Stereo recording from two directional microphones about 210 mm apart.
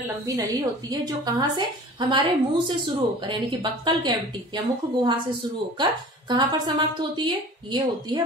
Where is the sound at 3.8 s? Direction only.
20° right (ahead or behind).